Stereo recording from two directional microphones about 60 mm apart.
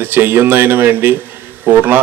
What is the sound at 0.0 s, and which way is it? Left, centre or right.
A man's voice, right.